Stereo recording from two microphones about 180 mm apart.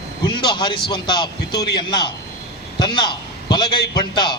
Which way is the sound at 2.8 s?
25° left (ahead or behind).